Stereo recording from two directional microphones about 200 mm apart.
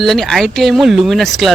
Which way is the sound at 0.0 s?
Centre (ahead or behind).